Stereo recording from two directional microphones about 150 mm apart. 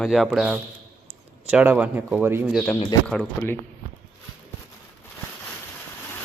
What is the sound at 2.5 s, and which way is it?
Speech, centre (ahead or behind).